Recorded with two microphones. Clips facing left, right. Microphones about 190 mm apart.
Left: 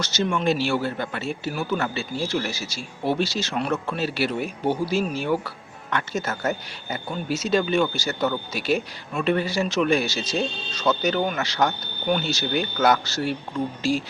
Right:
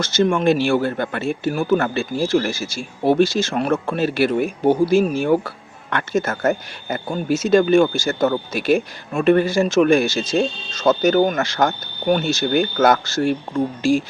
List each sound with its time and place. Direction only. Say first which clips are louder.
0.0 s a man's voice: right 7 dB; 50° right (ahead or behind)